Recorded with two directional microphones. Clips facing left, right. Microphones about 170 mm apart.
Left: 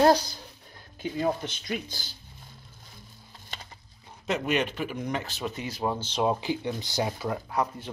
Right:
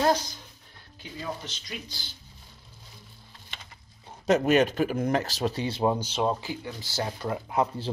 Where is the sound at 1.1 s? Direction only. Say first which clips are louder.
Left 7 dB; 55° left (ahead or behind).